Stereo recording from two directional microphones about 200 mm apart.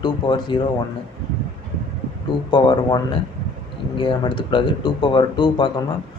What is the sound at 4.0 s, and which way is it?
Speech, 25° left (ahead or behind).